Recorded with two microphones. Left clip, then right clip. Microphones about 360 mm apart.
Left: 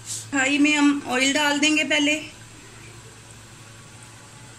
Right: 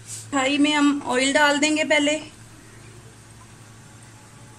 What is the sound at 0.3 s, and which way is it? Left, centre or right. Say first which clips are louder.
Speech: even; right.